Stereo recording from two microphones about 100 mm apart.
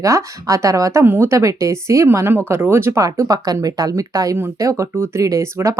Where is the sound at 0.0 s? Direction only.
30° right (ahead or behind).